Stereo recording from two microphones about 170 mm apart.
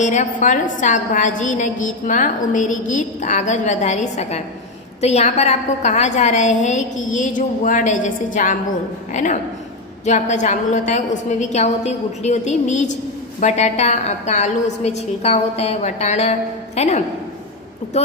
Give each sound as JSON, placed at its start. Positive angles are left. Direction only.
{"t": 0.0, "sound": "a woman's voice", "side_deg": 45}